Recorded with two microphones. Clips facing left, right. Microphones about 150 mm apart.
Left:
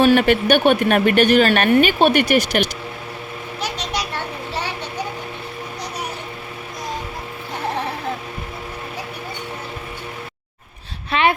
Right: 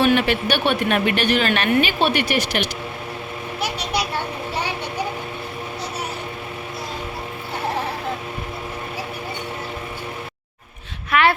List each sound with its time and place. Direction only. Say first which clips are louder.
0.0 s a woman's voice: left 4 dB; 45° left (ahead or behind)
3.6 s vehicle: right 1 dB; 10° right (ahead or behind)
11.1 s a sound: even; 20° left (ahead or behind)